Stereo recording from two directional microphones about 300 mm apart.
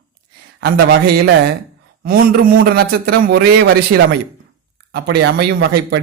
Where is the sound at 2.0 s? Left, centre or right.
Right.